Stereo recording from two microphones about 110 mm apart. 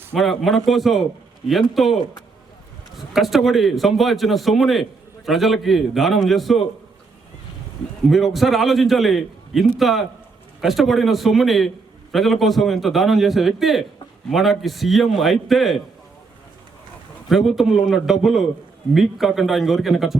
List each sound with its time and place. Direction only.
0.1 s a man's voice: centre (ahead or behind)
3.1 s a man's voice: centre (ahead or behind)
8.1 s a man's voice: centre (ahead or behind)
17.2 s a man's voice: centre (ahead or behind)